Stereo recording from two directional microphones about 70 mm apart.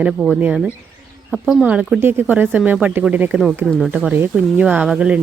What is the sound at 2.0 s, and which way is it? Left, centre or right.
Speech, right.